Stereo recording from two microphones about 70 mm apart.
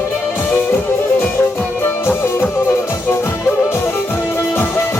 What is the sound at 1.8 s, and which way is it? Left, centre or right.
Music, left.